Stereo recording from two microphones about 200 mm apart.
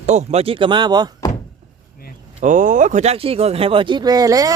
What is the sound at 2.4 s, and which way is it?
Speech, 40° right (ahead or behind).